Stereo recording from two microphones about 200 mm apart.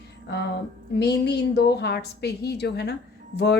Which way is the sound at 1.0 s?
55° left (ahead or behind).